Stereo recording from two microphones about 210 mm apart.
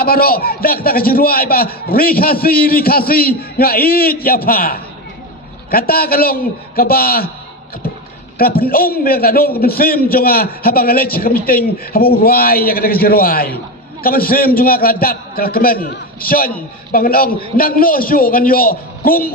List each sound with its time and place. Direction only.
0.0 s a man's voice: 45° left (ahead or behind)
8.4 s a man's voice: 45° left (ahead or behind)